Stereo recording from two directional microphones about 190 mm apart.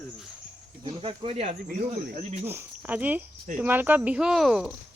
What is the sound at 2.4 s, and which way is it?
Speech, 10° right (ahead or behind).